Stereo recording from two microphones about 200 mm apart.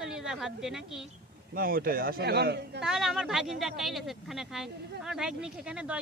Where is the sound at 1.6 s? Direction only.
45° right (ahead or behind).